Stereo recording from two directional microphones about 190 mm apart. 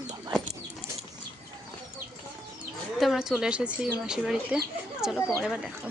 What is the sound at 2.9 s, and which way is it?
A man's voice, centre (ahead or behind).